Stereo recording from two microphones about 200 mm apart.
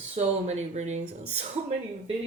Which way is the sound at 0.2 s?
35° right (ahead or behind).